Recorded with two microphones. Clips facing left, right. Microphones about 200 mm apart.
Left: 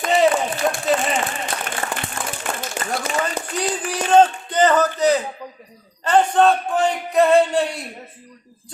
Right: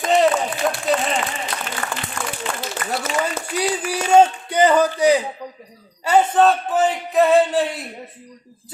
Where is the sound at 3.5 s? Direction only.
10° right (ahead or behind).